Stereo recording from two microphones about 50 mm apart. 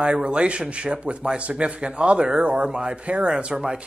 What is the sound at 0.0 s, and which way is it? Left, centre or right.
Speech, centre.